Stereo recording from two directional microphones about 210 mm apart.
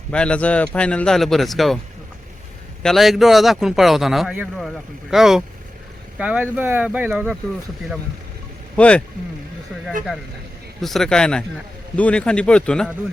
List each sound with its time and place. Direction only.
0.1 s a man's voice: 5° left (ahead or behind)
2.8 s a man's voice: centre (ahead or behind)
8.7 s speech: 5° left (ahead or behind)
10.8 s a man's voice: centre (ahead or behind)